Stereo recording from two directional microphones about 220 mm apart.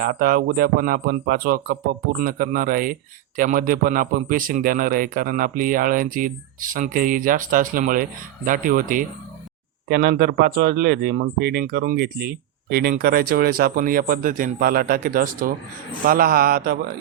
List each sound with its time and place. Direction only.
0.0 s speech: 40° right (ahead or behind)